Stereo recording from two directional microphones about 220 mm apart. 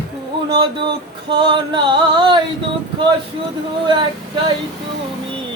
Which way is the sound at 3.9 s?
20° right (ahead or behind).